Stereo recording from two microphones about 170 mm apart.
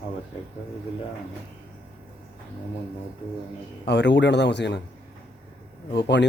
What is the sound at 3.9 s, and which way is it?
Speech, 90° left.